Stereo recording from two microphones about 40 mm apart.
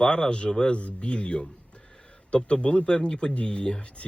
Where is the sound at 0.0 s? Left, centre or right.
Left.